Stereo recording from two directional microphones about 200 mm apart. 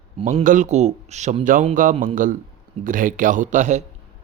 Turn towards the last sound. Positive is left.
turn(degrees=-40)  # may be behind; listen again after turning